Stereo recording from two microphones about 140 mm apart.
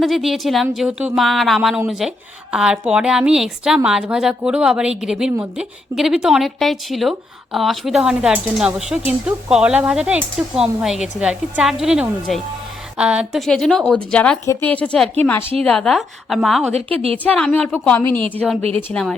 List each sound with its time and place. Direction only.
0.0 s a woman's voice: centre (ahead or behind)
16.7 s a woman's voice: 45° right (ahead or behind)
17.3 s a woman's voice: 5° left (ahead or behind)